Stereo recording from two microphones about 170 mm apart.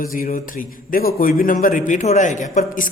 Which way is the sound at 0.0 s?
55° left (ahead or behind).